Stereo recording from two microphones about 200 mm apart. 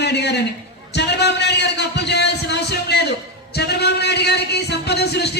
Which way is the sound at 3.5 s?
55° left (ahead or behind).